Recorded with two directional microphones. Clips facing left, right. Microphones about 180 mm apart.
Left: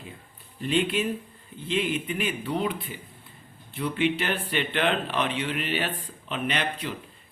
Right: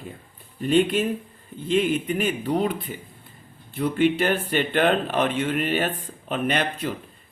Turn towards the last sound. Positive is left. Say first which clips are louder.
# right 4 dB
turn(degrees=-45)  # may be behind; listen again after turning